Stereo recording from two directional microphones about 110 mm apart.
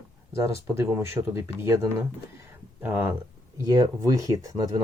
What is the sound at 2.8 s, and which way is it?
Speech, 20° right (ahead or behind).